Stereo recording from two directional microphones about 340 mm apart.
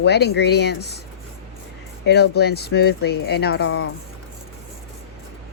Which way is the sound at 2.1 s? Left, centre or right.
Left.